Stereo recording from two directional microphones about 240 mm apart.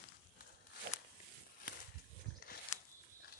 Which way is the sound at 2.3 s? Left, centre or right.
Left.